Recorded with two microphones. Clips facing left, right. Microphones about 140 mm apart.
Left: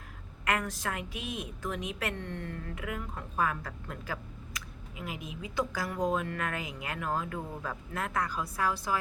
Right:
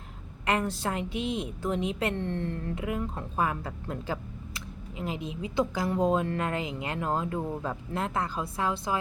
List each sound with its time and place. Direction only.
0.4 s a woman's voice: 30° right (ahead or behind)